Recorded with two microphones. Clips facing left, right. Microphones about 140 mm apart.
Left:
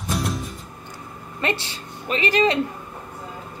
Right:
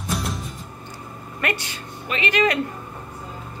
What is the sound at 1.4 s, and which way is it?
Speech, 30° left (ahead or behind).